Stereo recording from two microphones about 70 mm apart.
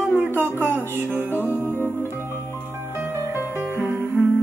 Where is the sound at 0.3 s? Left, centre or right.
Right.